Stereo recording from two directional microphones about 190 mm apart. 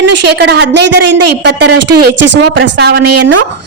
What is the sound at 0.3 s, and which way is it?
A woman's voice, 60° right (ahead or behind).